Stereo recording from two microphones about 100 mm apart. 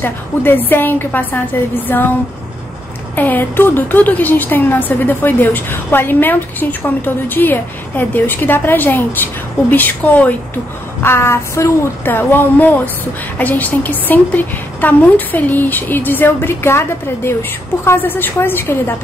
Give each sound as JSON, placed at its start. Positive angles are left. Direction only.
{"t": 0.0, "sound": "a woman's voice", "side_deg": 20}
{"t": 3.2, "sound": "a woman's voice", "side_deg": 20}